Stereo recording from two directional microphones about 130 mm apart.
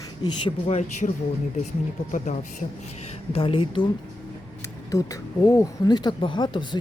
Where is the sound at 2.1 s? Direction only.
75° left (ahead or behind).